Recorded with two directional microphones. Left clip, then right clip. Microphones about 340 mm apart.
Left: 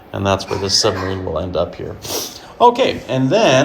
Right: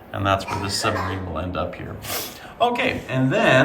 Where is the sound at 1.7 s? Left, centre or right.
Centre.